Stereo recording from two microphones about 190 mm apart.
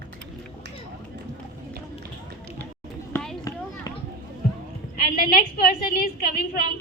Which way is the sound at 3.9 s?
20° left (ahead or behind).